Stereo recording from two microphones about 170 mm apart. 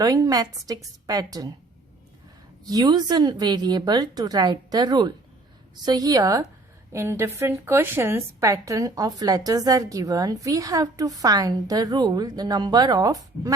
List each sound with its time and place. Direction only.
0.0 s a woman's voice: 20° right (ahead or behind)
2.6 s a woman's voice: 25° right (ahead or behind)